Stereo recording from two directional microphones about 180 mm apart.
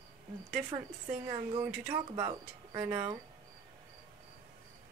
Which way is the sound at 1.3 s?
20° right (ahead or behind).